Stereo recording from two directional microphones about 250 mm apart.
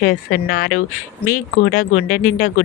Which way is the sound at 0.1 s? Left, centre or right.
Left.